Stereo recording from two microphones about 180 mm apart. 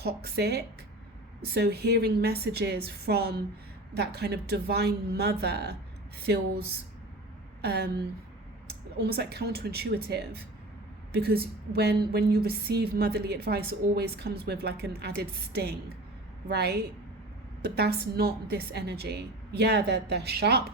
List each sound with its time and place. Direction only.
0.0 s a woman's voice: 60° right (ahead or behind)
9.0 s a woman's voice: 65° right (ahead or behind)